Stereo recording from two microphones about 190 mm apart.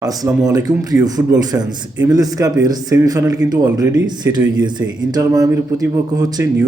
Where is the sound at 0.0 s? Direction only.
20° right (ahead or behind).